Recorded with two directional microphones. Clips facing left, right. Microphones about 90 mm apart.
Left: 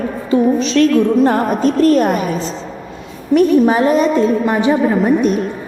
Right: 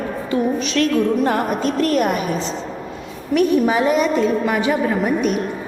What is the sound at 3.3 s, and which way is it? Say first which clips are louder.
A woman's voice: left 5 dB; 40° left (ahead or behind).